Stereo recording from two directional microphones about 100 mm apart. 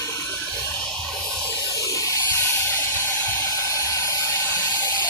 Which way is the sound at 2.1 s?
25° left (ahead or behind).